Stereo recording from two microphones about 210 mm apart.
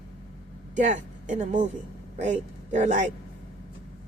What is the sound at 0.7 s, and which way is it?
Speech, 35° right (ahead or behind).